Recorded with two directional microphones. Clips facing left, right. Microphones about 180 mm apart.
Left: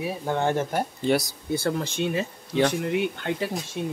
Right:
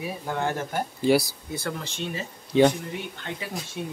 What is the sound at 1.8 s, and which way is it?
Speech, 50° left (ahead or behind).